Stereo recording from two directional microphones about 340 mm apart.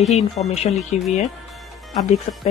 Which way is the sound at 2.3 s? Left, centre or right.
Left.